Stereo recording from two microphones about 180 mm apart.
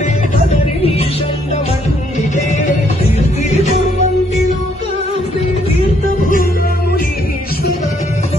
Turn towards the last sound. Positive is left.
turn(degrees=50)  # may be behind; listen again after turning